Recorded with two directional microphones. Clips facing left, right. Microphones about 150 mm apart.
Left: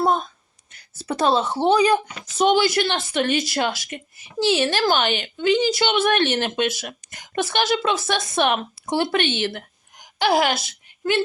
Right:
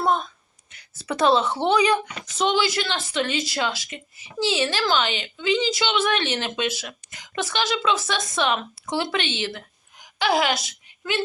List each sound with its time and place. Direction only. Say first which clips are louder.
0.0 s a sound: left 2 dB; 40° left (ahead or behind)
0.7 s a woman's voice: left 2 dB; 40° left (ahead or behind)
2.4 s a woman's voice: left 5 dB; 50° left (ahead or behind)